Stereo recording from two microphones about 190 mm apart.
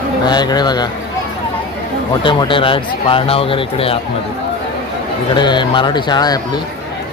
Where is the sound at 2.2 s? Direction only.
25° left (ahead or behind).